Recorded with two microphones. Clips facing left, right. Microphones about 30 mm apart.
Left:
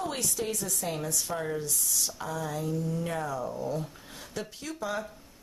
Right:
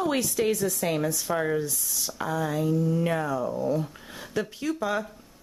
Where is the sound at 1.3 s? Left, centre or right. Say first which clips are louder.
Right 8 dB; right.